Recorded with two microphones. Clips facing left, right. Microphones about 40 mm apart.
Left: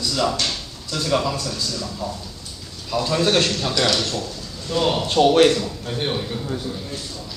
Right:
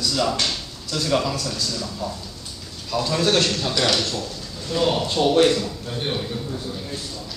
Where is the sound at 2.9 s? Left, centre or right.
Centre.